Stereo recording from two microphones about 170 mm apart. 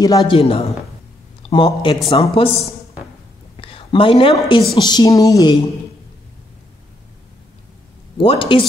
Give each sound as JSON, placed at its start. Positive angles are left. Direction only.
{"t": 0.0, "sound": "speech", "side_deg": 20}
{"t": 0.4, "sound": "speech", "side_deg": 35}
{"t": 3.5, "sound": "a sound", "side_deg": 30}
{"t": 4.4, "sound": "speech", "side_deg": 25}
{"t": 8.2, "sound": "speech", "side_deg": 30}